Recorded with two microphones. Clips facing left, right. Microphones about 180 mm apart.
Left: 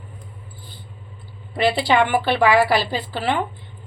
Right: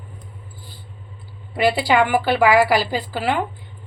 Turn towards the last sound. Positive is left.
turn(degrees=-10)  # may be behind; listen again after turning